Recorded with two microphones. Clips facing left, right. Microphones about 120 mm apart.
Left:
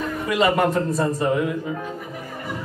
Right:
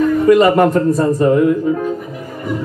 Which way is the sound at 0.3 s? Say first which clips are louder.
Right 8 dB; 45° right (ahead or behind).